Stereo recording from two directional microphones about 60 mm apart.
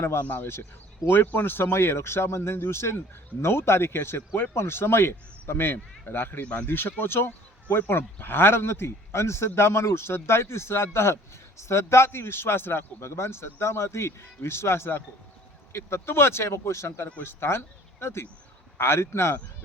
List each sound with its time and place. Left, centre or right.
0.0 s speech: left
6.4 s speech: left
6.7 s speech: left